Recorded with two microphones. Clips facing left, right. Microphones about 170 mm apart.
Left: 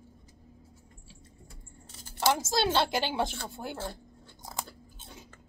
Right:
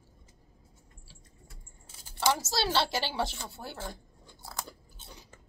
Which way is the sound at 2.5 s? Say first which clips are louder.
Left 2 dB; 15° left (ahead or behind).